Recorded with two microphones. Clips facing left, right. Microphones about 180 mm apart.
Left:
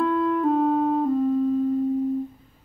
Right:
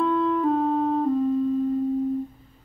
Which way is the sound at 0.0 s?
5° left (ahead or behind).